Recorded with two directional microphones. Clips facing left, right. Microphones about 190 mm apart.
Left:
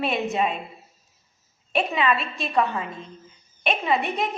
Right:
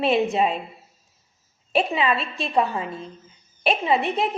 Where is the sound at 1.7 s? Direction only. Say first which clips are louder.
Right 1 dB; 30° right (ahead or behind).